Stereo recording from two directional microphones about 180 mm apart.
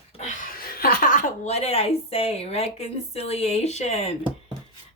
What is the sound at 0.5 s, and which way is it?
Chuckle, 55° left (ahead or behind).